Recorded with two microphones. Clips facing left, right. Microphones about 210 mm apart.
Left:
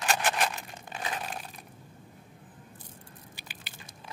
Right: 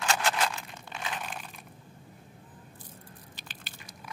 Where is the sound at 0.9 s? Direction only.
35° left (ahead or behind).